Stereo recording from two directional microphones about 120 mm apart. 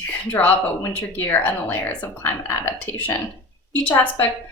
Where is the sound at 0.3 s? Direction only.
15° left (ahead or behind).